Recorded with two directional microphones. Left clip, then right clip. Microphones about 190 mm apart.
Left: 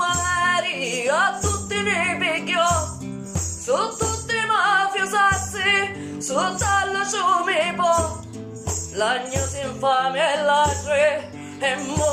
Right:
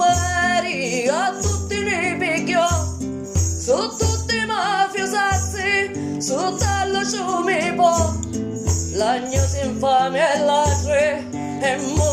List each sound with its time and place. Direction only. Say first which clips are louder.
0.0 s music: right 3 dB; 25° right (ahead or behind)
4.3 s music: left 3 dB; 25° right (ahead or behind)
9.0 s music: right 2 dB; 30° right (ahead or behind)